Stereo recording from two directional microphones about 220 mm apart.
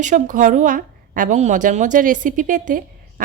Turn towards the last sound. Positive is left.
turn(degrees=-35)  # may be behind; listen again after turning